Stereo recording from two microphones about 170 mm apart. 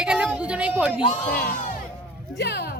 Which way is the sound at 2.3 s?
70° left (ahead or behind).